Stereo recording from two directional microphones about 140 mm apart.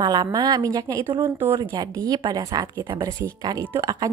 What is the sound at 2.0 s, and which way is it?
A woman's voice, 30° right (ahead or behind).